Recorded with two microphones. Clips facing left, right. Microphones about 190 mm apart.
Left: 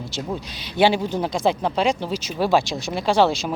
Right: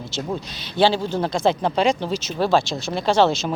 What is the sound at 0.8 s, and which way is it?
Speech, 15° left (ahead or behind).